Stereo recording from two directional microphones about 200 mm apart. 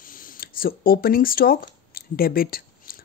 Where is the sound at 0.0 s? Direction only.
45° left (ahead or behind).